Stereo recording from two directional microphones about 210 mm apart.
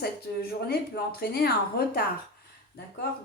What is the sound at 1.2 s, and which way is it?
Speech, 50° left (ahead or behind).